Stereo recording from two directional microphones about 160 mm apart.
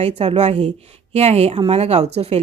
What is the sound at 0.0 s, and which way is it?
Speech, 40° right (ahead or behind).